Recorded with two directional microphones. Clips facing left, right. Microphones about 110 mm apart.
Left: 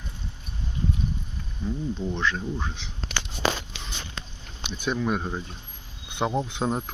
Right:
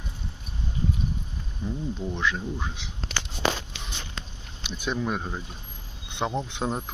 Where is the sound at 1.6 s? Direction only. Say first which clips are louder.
Left 2 dB; 5° right (ahead or behind).